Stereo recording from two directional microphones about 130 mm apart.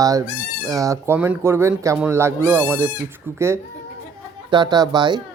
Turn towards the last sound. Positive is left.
turn(degrees=-35)  # may be behind; listen again after turning